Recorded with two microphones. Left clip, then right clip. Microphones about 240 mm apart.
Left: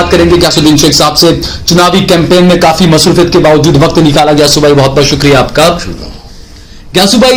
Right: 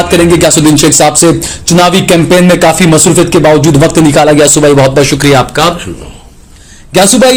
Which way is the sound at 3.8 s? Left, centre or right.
Right.